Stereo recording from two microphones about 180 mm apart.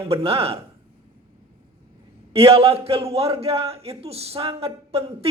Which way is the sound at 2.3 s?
35° right (ahead or behind).